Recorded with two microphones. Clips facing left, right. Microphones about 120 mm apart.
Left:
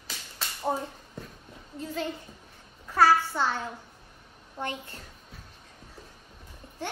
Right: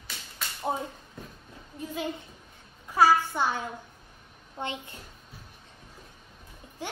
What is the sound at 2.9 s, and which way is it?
A woman's voice, 15° right (ahead or behind).